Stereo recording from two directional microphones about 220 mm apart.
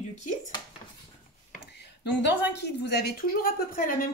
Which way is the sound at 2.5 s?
50° left (ahead or behind).